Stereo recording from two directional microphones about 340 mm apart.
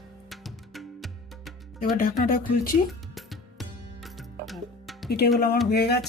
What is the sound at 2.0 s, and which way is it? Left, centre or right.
Speech, left.